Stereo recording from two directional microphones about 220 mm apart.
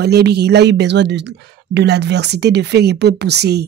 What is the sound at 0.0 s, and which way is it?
Speech, 50° right (ahead or behind).